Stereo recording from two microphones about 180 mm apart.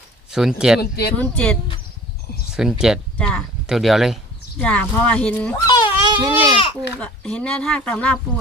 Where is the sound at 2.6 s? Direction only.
Centre (ahead or behind).